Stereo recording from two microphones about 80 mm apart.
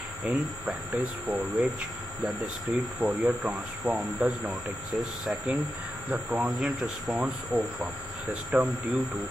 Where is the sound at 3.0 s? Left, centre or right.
Centre.